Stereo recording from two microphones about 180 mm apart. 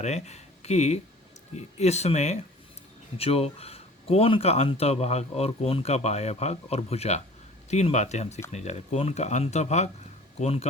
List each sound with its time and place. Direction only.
0.0 s speech: 40° left (ahead or behind)